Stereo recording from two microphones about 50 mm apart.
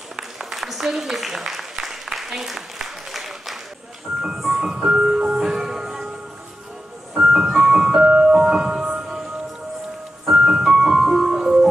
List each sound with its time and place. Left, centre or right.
0.1 s a sound: centre
4.4 s music: centre
7.2 s music: centre
10.2 s music: centre